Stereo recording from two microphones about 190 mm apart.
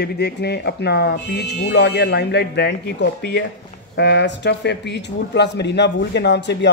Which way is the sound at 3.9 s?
65° left (ahead or behind).